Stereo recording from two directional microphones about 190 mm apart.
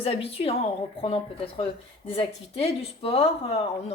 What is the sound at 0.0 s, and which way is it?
Speech, 30° left (ahead or behind).